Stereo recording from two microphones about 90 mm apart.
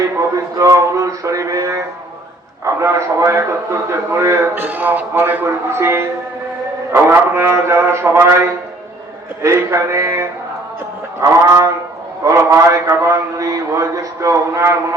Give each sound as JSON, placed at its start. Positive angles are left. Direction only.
{"t": 0.2, "sound": "a man's voice", "side_deg": -40}